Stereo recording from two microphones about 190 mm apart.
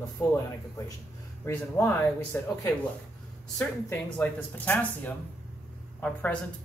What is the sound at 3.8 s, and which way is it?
Speech, 10° left (ahead or behind).